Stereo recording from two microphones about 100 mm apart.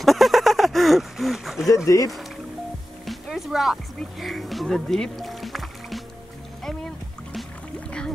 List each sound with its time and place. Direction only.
0.0 s a sound: centre (ahead or behind)
1.9 s speech: 35° left (ahead or behind)
3.1 s music: centre (ahead or behind)
4.0 s speech: centre (ahead or behind)